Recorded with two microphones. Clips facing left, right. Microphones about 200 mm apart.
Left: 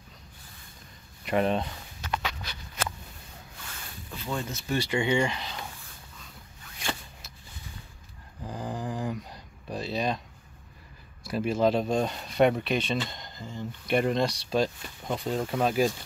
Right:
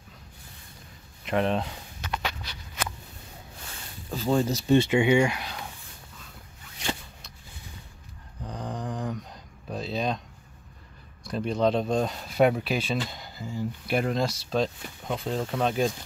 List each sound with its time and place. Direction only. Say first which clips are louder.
1.2 s speech: even; centre (ahead or behind)
4.1 s speech: right 9 dB; 35° right (ahead or behind)
4.7 s speech: right 5 dB; 20° right (ahead or behind)
8.5 s a sound: even; 5° left (ahead or behind)
11.2 s speech: even; 5° left (ahead or behind)